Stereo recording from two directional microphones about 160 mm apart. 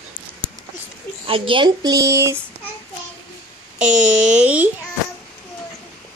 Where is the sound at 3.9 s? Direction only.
50° right (ahead or behind).